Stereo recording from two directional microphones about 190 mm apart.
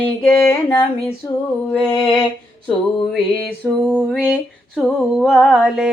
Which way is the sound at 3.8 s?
5° right (ahead or behind).